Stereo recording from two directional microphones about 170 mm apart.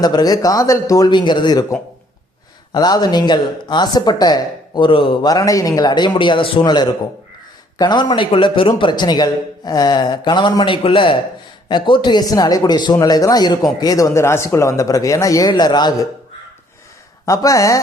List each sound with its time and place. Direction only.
0.0 s speech: 25° left (ahead or behind)
2.7 s speech: 25° left (ahead or behind)
17.2 s speech: 20° left (ahead or behind)